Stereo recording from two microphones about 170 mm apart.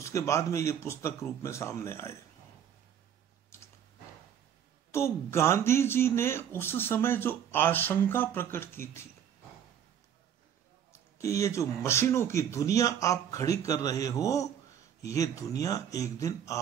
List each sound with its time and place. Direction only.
0.0 s speech: 15° left (ahead or behind)
4.9 s speech: 15° left (ahead or behind)
10.9 s speech: 20° left (ahead or behind)